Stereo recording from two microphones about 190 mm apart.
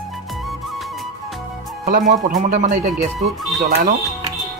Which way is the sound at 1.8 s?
45° right (ahead or behind).